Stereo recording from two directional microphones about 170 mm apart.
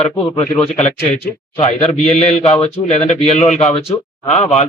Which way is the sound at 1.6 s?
40° left (ahead or behind).